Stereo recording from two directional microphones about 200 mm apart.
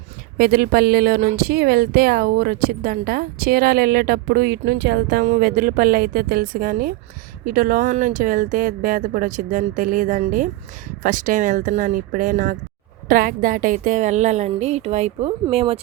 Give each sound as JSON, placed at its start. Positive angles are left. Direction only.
{"t": 0.3, "sound": "speech", "side_deg": -50}
{"t": 5.2, "sound": "speech", "side_deg": -45}